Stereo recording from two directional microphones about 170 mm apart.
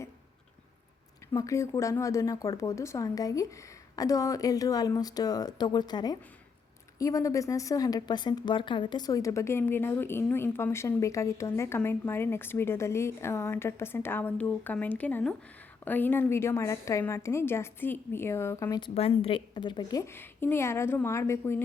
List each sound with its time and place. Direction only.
1.3 s a woman's voice: 15° left (ahead or behind)
18.8 s a woman's voice: 35° left (ahead or behind); by 21.6 s 15° left (ahead or behind)